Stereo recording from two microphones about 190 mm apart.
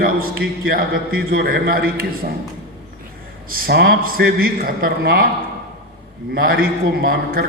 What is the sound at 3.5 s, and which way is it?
A man's voice, 55° right (ahead or behind).